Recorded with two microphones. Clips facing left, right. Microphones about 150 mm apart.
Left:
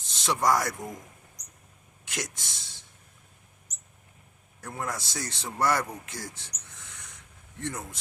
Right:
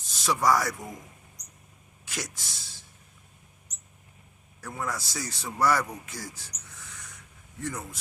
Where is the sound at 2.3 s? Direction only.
20° left (ahead or behind).